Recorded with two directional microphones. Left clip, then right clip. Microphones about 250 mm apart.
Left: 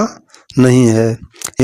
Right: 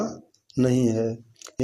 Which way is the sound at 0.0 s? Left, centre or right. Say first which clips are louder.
Left 12 dB; left.